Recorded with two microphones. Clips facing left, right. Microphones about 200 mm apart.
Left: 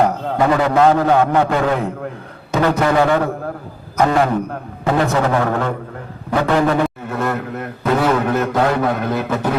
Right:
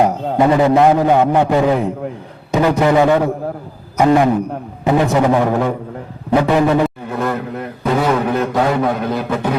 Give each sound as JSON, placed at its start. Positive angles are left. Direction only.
{"t": 0.0, "sound": "a man's voice", "side_deg": -20}
{"t": 6.8, "sound": "a sound", "side_deg": 0}
{"t": 8.0, "sound": "a man's voice", "side_deg": 0}